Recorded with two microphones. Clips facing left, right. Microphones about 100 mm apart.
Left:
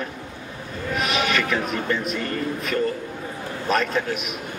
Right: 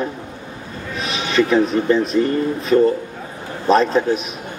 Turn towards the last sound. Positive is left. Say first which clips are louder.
# right 8 dB
turn(degrees=-30)  # may be behind; listen again after turning